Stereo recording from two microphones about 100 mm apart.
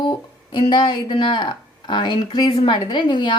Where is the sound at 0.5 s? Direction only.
50° left (ahead or behind).